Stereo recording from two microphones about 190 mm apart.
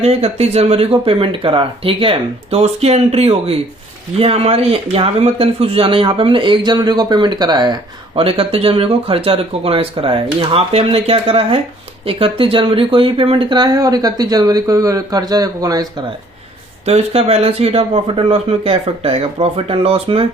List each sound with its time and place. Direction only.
0.0 s speech: 35° right (ahead or behind)
16.8 s speech: 35° right (ahead or behind)